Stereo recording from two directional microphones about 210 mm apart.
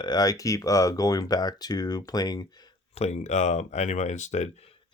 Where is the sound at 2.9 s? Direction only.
30° left (ahead or behind).